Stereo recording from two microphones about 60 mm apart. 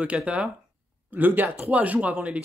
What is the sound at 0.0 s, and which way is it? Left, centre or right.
Speech, right.